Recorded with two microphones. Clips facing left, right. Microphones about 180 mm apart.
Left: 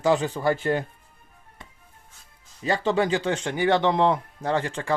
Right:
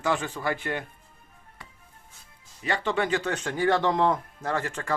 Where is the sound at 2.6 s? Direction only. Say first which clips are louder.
Left 4 dB; 35° left (ahead or behind).